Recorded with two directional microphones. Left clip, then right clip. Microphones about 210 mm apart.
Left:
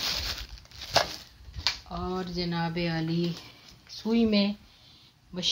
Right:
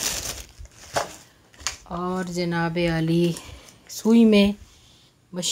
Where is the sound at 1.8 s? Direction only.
55° right (ahead or behind).